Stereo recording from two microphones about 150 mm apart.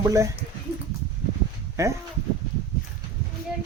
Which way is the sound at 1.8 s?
20° right (ahead or behind).